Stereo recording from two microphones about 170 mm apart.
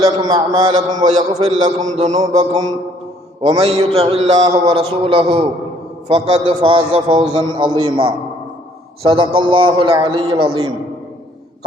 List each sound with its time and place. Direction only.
0.0 s a man's voice: 25° right (ahead or behind)
1.8 s a man's voice: 45° right (ahead or behind)
2.2 s a man's voice: 25° right (ahead or behind)
4.4 s a man's voice: 30° right (ahead or behind)